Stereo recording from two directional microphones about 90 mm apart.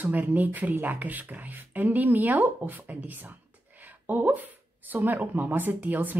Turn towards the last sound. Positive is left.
turn(degrees=-20)  # may be behind; listen again after turning